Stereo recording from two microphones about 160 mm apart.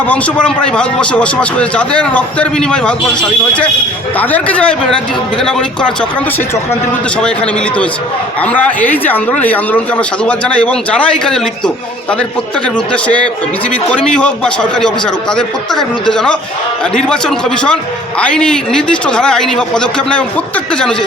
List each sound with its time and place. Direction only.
0.1 s a man's voice: 5° left (ahead or behind)
7.2 s a man's voice: 5° left (ahead or behind)